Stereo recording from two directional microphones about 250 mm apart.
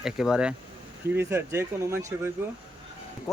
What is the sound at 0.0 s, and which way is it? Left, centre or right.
A man's voice, centre.